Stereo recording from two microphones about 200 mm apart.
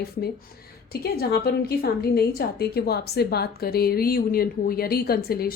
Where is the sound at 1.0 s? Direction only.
50° left (ahead or behind).